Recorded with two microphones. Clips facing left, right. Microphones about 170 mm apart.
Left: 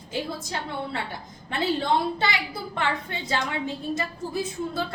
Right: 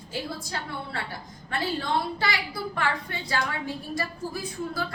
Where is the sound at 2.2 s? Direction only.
20° left (ahead or behind).